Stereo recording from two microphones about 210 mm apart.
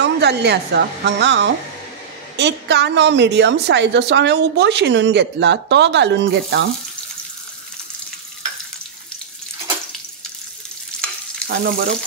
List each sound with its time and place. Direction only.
0.0 s a woman's voice: 55° right (ahead or behind)
10.9 s stir: 5° left (ahead or behind)
11.4 s frying: 50° right (ahead or behind)